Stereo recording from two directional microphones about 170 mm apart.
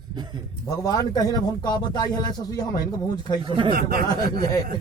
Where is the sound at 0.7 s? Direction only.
20° left (ahead or behind).